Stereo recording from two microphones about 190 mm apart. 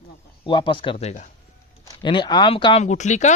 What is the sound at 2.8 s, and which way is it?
Speech, 40° left (ahead or behind).